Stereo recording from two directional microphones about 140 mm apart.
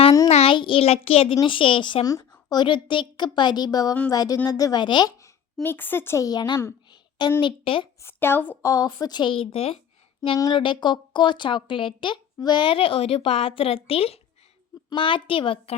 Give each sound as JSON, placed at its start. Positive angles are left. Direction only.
{"t": 0.3, "sound": "child singing", "side_deg": 50}
{"t": 0.5, "sound": "a woman's voice", "side_deg": 35}
{"t": 5.6, "sound": "speech", "side_deg": 15}
{"t": 8.0, "sound": "speech", "side_deg": 15}
{"t": 8.7, "sound": "speech", "side_deg": 30}
{"t": 10.3, "sound": "speech", "side_deg": 30}